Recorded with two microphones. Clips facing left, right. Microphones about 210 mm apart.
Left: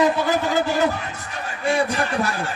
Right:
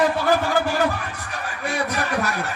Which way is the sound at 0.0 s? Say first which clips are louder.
Even; 20° left (ahead or behind).